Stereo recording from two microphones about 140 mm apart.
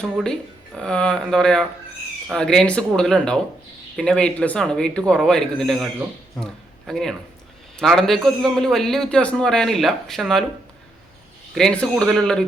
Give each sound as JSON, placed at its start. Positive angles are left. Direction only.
{"t": 0.0, "sound": "a man's voice", "side_deg": 5}
{"t": 11.5, "sound": "a man's voice", "side_deg": 5}